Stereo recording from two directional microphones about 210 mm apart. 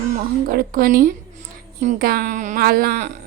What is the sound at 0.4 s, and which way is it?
Speech, 45° right (ahead or behind).